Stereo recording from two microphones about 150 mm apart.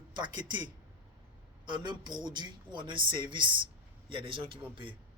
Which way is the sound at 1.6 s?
30° right (ahead or behind).